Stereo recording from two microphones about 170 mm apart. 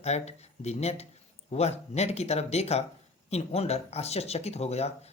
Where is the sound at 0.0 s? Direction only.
40° left (ahead or behind).